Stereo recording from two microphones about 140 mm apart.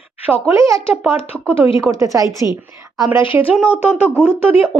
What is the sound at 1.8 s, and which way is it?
Speech, 20° right (ahead or behind).